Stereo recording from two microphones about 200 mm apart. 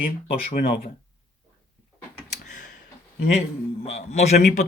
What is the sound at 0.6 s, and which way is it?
Speech, 50° left (ahead or behind).